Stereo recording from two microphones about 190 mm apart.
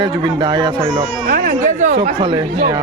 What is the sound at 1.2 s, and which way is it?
Speech, 50° right (ahead or behind).